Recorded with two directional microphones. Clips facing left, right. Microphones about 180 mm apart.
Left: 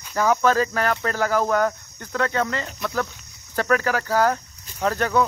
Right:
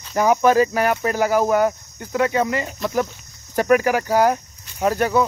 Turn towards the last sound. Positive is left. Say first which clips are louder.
# right 3 dB
turn(degrees=-10)  # may be behind; listen again after turning